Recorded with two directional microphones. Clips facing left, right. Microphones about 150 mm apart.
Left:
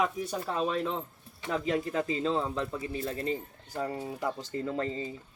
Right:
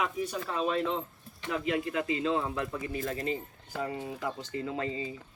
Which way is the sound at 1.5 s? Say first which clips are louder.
Left 1 dB; 35° left (ahead or behind).